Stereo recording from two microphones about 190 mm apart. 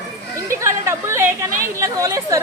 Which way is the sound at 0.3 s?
15° right (ahead or behind).